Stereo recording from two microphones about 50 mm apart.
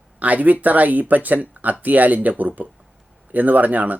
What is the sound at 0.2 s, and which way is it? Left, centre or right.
Speech, right.